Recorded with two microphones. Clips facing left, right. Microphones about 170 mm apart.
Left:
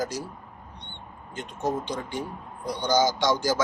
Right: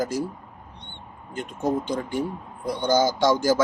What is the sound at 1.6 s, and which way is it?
A man's voice, 50° right (ahead or behind).